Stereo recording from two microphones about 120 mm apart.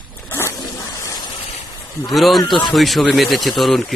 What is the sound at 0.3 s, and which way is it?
Zipper, 20° left (ahead or behind).